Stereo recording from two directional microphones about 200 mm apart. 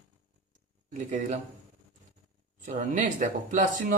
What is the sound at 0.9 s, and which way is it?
Speech, 40° right (ahead or behind).